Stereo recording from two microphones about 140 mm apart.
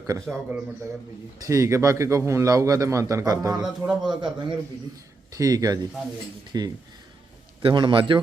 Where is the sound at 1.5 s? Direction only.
20° right (ahead or behind).